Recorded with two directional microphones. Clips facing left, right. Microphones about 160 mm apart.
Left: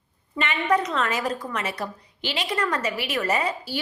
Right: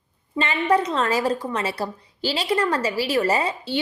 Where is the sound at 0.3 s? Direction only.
30° right (ahead or behind).